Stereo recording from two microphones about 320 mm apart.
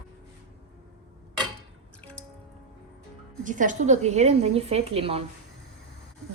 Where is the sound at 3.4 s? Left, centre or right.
Right.